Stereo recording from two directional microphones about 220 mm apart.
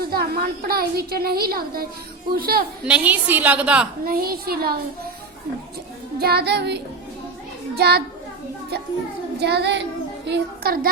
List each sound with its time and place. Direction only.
0.0 s a woman's voice: 45° right (ahead or behind)
2.8 s a woman's voice: 5° right (ahead or behind)
4.0 s a woman's voice: 40° right (ahead or behind)
6.1 s a woman's voice: 45° right (ahead or behind)
9.4 s a woman's voice: 50° right (ahead or behind)